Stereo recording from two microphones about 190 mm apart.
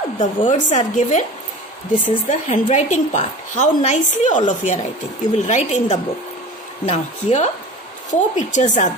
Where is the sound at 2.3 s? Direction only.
40° left (ahead or behind).